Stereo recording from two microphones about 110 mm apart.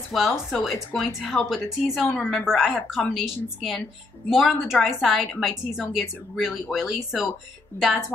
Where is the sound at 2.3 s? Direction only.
5° right (ahead or behind).